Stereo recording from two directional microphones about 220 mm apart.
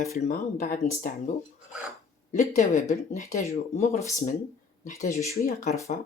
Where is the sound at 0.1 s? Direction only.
35° left (ahead or behind).